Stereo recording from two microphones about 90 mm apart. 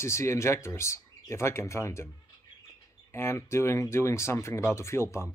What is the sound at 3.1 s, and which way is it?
Speech, 30° left (ahead or behind).